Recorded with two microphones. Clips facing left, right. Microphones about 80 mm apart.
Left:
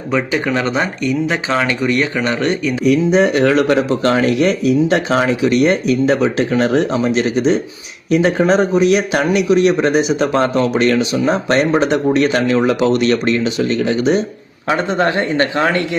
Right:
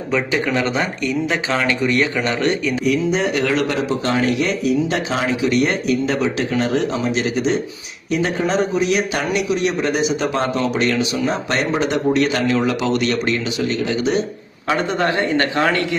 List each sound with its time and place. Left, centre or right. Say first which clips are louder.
0.1 s speech: left 3 dB; centre
2.8 s speech: left 7 dB; left
14.7 s speech: left 3 dB; left